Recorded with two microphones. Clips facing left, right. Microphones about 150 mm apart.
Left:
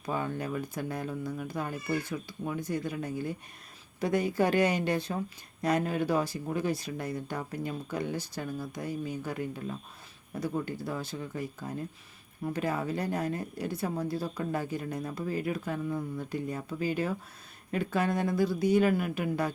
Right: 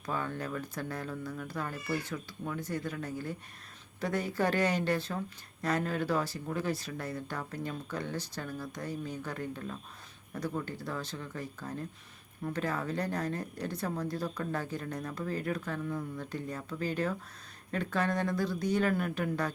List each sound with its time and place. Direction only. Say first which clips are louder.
0.0 s a woman's voice: left 3 dB; 15° left (ahead or behind)